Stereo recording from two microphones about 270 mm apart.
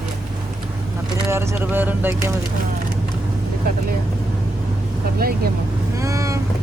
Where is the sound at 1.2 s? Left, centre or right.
Centre.